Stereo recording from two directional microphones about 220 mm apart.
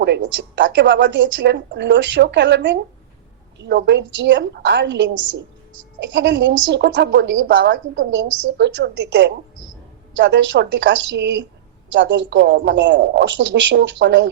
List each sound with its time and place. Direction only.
0.0 s a woman's voice: 50° right (ahead or behind)
6.1 s a woman's voice: 55° right (ahead or behind)